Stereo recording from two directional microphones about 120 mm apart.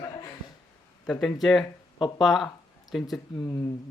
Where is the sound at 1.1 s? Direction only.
Centre (ahead or behind).